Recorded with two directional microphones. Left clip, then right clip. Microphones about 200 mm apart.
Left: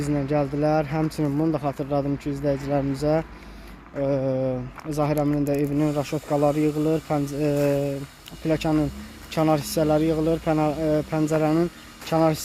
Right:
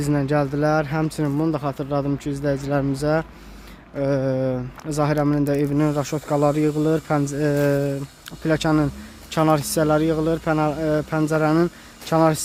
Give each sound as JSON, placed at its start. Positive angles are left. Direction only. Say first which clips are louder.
{"t": 0.0, "sound": "speech", "louder": "right 3 dB", "side_deg": -15}